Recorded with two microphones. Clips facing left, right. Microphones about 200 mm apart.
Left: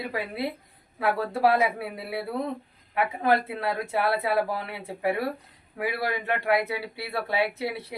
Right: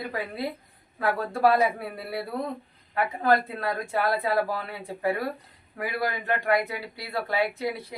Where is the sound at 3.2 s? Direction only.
25° left (ahead or behind).